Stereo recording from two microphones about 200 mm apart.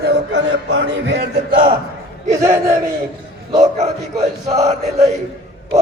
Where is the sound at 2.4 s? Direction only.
15° right (ahead or behind).